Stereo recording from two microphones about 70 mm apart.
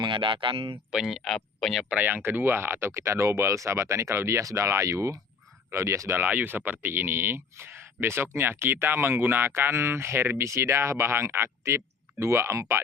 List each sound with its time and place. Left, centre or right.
0.9 s speech: centre
1.9 s speech: right
6.2 s speech: right